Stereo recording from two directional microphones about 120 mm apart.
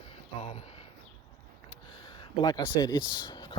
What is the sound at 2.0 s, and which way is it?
Speech, 35° left (ahead or behind).